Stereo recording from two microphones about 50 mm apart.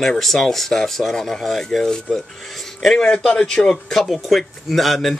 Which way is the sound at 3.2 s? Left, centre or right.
Centre.